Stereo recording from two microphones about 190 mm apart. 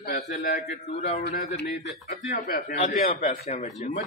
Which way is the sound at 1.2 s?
50° left (ahead or behind).